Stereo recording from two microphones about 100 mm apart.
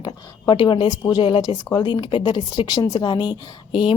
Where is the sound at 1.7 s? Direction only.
50° left (ahead or behind); by 2.4 s 65° left (ahead or behind).